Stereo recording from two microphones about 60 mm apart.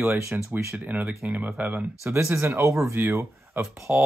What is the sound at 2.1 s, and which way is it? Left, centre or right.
Speech, right.